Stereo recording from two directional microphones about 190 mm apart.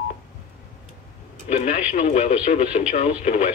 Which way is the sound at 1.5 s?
40° left (ahead or behind).